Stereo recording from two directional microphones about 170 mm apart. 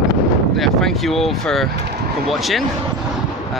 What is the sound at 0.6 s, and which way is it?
Speech, centre (ahead or behind).